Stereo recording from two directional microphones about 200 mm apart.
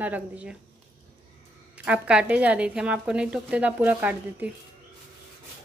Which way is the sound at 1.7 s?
5° right (ahead or behind).